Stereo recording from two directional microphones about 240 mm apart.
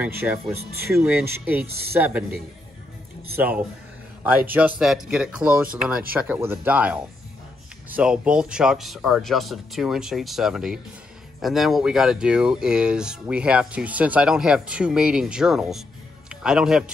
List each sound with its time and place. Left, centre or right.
0.0 s speech: centre
1.7 s speech: right
2.0 s speech: centre
3.3 s speech: centre